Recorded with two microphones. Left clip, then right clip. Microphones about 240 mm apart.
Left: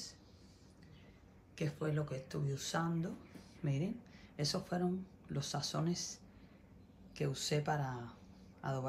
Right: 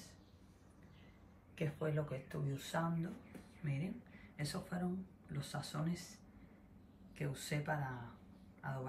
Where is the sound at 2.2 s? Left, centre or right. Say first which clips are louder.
Left 4 dB; left.